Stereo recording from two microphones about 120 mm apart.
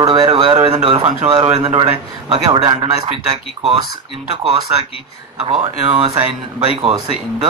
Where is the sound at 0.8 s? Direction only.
50° right (ahead or behind).